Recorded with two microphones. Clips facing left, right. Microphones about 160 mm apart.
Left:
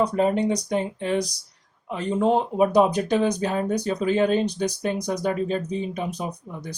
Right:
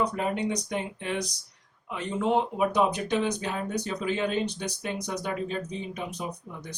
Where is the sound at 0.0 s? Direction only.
30° left (ahead or behind).